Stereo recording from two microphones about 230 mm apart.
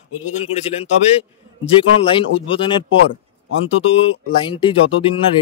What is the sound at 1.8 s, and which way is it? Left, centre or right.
A man's voice, left.